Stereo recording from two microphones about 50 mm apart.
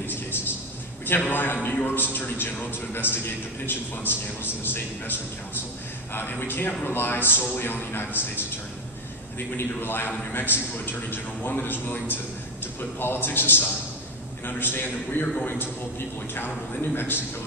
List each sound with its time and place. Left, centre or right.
0.0 s a sound: left
1.3 s a man's voice: left
2.0 s a man's voice: left
9.6 s a man's voice: left
16.3 s a man's voice: left